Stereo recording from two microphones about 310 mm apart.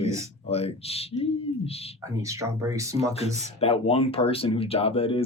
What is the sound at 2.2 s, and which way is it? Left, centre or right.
Speech, centre.